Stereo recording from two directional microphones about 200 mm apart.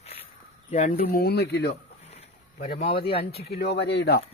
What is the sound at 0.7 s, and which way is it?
Speech, 35° left (ahead or behind).